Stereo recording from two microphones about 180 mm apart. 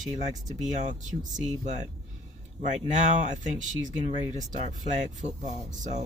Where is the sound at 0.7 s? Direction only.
45° right (ahead or behind).